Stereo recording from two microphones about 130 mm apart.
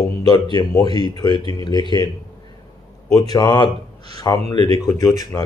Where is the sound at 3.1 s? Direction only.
30° left (ahead or behind).